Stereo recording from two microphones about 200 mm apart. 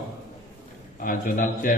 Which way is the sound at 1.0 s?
45° left (ahead or behind).